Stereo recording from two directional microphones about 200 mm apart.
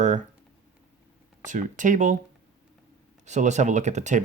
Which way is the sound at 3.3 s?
35° right (ahead or behind).